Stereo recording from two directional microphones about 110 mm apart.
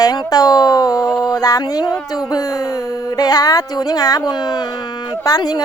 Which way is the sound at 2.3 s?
35° left (ahead or behind).